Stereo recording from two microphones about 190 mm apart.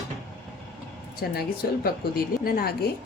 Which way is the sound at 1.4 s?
50° left (ahead or behind).